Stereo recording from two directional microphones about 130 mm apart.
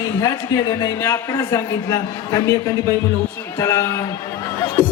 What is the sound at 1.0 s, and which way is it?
A man's voice, 25° left (ahead or behind).